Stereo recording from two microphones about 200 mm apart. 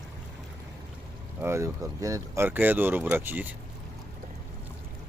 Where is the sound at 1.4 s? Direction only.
15° right (ahead or behind).